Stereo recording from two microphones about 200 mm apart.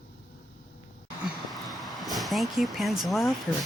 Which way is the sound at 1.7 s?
Centre (ahead or behind).